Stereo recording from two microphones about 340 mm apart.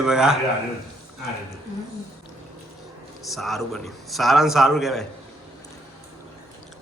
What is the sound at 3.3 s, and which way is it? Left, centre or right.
A man's voice, centre.